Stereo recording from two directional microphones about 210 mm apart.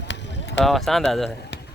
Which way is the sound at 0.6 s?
Centre (ahead or behind).